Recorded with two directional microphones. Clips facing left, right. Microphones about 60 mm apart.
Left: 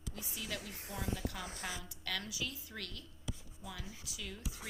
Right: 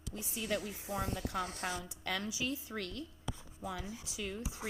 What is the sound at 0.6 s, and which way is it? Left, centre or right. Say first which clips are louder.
Speech: right 6 dB; centre.